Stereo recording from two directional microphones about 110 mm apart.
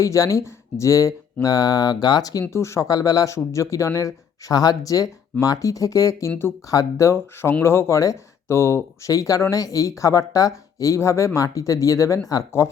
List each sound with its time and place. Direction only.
0.0 s speech: 30° left (ahead or behind)
2.5 s speech: 25° left (ahead or behind)